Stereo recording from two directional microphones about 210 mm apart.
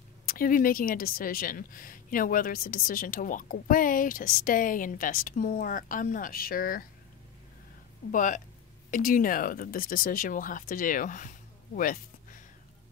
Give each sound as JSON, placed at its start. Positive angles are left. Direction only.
{"t": 0.3, "sound": "a woman's voice", "side_deg": 40}
{"t": 8.1, "sound": "a woman's voice", "side_deg": 40}